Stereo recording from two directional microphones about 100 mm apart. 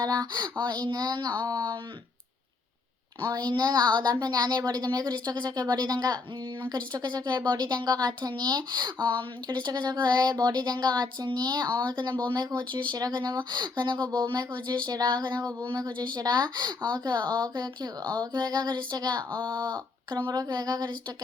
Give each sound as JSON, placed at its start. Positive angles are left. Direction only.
{"t": 0.0, "sound": "speech", "side_deg": -40}
{"t": 3.2, "sound": "speech", "side_deg": -50}
{"t": 20.3, "sound": "a sound", "side_deg": -40}